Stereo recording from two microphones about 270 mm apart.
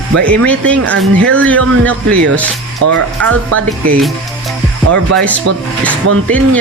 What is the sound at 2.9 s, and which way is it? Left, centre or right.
Speech, right.